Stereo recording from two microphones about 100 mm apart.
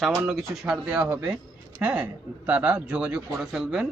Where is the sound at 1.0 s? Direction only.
20° right (ahead or behind); by 3.8 s 5° right (ahead or behind).